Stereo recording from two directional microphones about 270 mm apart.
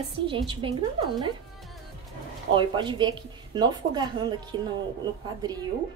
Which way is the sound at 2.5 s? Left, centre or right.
Centre.